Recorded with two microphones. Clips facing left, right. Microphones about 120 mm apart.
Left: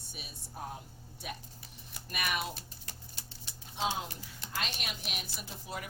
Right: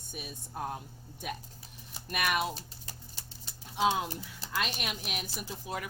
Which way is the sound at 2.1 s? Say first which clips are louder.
Right 5 dB; 50° right (ahead or behind).